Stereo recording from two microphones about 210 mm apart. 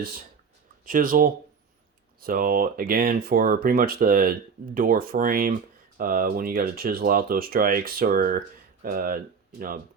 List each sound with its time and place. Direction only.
0.9 s speech: 40° right (ahead or behind)